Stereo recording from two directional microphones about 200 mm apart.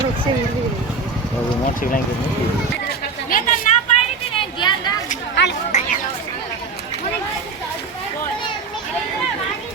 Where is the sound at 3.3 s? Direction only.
40° left (ahead or behind).